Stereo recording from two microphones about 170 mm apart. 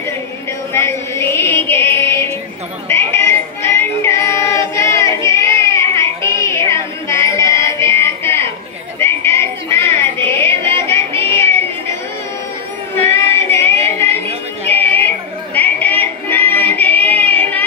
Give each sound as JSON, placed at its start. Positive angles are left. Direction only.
{"t": 0.7, "sound": "music", "side_deg": 15}
{"t": 2.9, "sound": "female singing", "side_deg": 15}
{"t": 6.4, "sound": "music", "side_deg": 15}
{"t": 9.0, "sound": "a sound", "side_deg": 15}
{"t": 12.9, "sound": "female singing", "side_deg": 15}
{"t": 14.7, "sound": "yodeling", "side_deg": 10}
{"t": 16.0, "sound": "female singing", "side_deg": 10}